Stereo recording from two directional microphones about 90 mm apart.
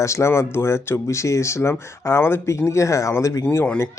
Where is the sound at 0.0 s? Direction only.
35° left (ahead or behind).